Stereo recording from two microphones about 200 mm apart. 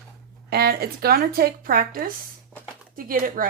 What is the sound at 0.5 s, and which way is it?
A woman's voice, 50° right (ahead or behind).